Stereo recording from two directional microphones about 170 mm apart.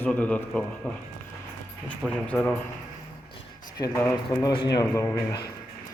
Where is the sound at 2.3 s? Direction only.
10° left (ahead or behind).